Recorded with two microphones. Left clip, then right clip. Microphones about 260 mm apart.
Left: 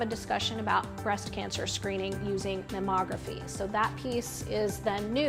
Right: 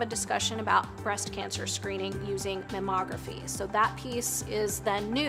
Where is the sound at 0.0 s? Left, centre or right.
Left.